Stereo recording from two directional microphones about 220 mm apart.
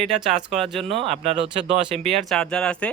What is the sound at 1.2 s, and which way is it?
Speech, 25° right (ahead or behind).